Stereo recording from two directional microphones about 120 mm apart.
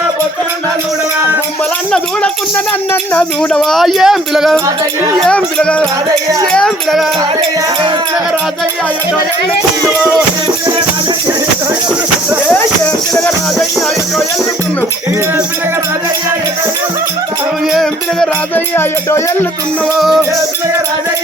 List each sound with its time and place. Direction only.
2.9 s speech: 10° left (ahead or behind)
12.5 s music: 15° left (ahead or behind)
17.7 s music: centre (ahead or behind)
18.5 s speech: 15° left (ahead or behind)
20.0 s speech: centre (ahead or behind)